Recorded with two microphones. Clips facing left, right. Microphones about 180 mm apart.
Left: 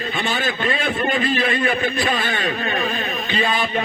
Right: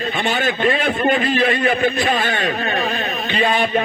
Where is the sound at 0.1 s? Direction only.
45° right (ahead or behind).